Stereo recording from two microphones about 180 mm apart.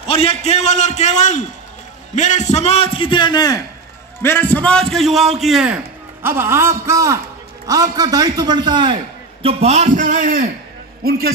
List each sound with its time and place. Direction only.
0.1 s a man's voice: 30° left (ahead or behind); by 5.8 s centre (ahead or behind)
6.2 s a man's voice: 15° right (ahead or behind); by 10.5 s 50° right (ahead or behind)